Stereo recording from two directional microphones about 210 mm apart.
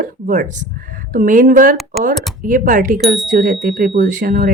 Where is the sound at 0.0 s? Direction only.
35° right (ahead or behind).